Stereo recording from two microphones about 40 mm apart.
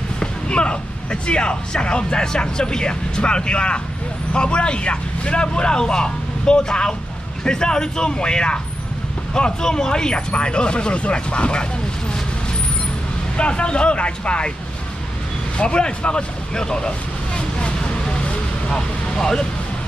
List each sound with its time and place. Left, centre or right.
0.2 s speech: left
13.4 s speech: left
15.5 s vehicle: left
18.7 s speech: centre